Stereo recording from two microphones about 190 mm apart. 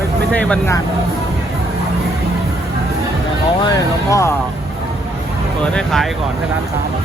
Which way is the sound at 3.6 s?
20° left (ahead or behind).